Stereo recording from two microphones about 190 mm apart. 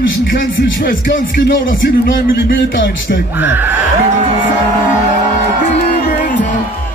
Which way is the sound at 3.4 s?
10° right (ahead or behind).